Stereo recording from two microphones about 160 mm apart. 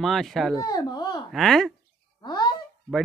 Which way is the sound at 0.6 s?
25° left (ahead or behind).